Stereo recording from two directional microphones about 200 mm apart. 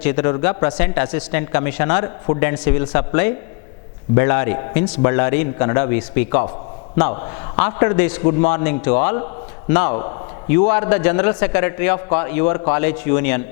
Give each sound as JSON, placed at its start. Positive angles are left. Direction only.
{"t": 0.0, "sound": "a man's voice", "side_deg": 10}